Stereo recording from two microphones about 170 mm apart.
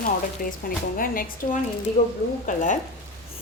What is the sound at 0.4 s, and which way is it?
A woman's voice, 55° left (ahead or behind).